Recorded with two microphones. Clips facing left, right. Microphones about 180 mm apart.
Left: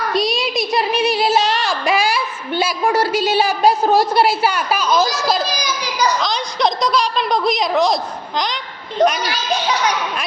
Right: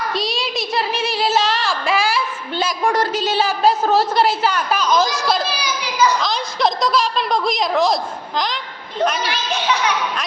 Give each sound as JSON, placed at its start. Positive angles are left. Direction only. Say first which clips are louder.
{"t": 0.1, "sound": "child singing", "louder": "left 4 dB", "side_deg": 15}
{"t": 5.5, "sound": "a child's voice", "louder": "left 1 dB", "side_deg": 40}
{"t": 6.2, "sound": "a woman's voice", "louder": "left 1 dB", "side_deg": 0}
{"t": 9.2, "sound": "a child's voice", "louder": "left 1 dB", "side_deg": 35}